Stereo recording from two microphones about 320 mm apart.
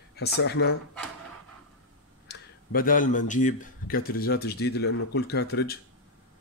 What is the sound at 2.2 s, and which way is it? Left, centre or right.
Speech, left.